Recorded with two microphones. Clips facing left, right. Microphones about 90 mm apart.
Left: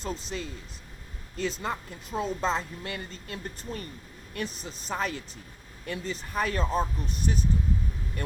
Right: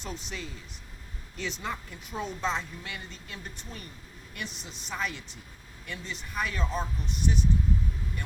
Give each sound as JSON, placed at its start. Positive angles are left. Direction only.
{"t": 0.0, "sound": "a woman's voice", "side_deg": 35}